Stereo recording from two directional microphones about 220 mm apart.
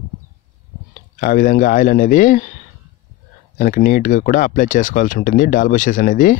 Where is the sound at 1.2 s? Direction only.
35° left (ahead or behind).